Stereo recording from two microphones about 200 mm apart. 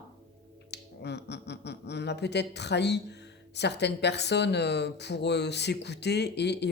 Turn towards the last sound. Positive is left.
turn(degrees=60)  # may be behind; listen again after turning